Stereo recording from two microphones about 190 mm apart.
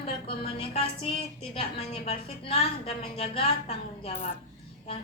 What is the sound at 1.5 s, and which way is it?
A woman's voice, 30° left (ahead or behind).